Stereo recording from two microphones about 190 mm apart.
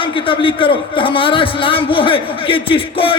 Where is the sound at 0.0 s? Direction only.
25° left (ahead or behind).